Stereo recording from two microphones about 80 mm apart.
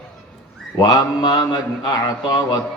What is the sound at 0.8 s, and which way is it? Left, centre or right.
A man's voice, left.